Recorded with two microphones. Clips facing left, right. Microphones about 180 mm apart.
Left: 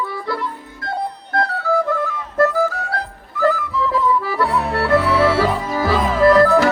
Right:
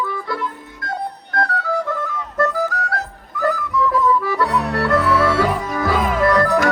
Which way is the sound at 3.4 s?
25° left (ahead or behind).